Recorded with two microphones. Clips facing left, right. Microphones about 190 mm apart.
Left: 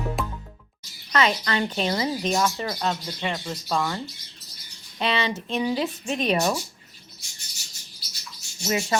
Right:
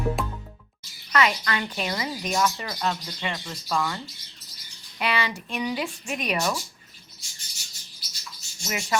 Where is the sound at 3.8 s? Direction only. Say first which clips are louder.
Left 1 dB; 15° left (ahead or behind).